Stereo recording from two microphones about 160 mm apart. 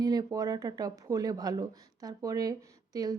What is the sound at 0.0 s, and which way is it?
Speech, 25° right (ahead or behind).